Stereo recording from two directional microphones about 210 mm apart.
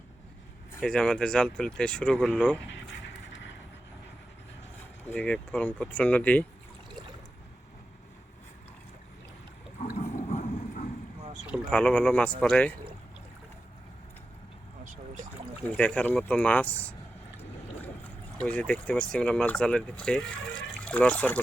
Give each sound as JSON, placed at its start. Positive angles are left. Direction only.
{"t": 0.8, "sound": "speech", "side_deg": 5}
{"t": 5.1, "sound": "speech", "side_deg": 5}
{"t": 9.8, "sound": "a sound", "side_deg": 40}
{"t": 11.7, "sound": "speech", "side_deg": 5}
{"t": 14.8, "sound": "pour", "side_deg": -35}
{"t": 15.8, "sound": "speech", "side_deg": 5}
{"t": 18.3, "sound": "speech", "side_deg": 5}